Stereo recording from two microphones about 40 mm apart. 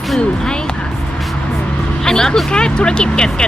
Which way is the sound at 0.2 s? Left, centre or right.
Centre.